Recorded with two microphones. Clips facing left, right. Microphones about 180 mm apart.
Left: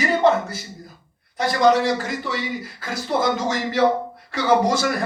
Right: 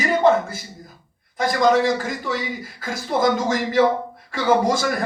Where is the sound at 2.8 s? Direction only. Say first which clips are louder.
Right 2 dB; 50° right (ahead or behind).